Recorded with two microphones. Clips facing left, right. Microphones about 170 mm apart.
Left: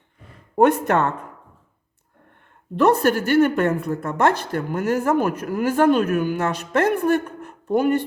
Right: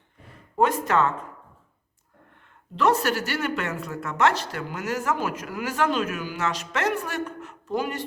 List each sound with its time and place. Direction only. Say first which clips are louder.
0.6 s speech: left 5 dB; 60° left (ahead or behind)
2.7 s speech: left 5 dB; 55° left (ahead or behind)